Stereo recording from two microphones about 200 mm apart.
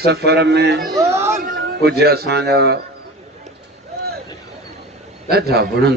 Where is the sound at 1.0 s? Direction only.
15° right (ahead or behind).